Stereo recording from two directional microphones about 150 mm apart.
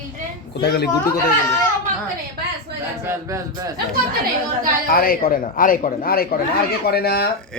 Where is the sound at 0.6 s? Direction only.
90° left.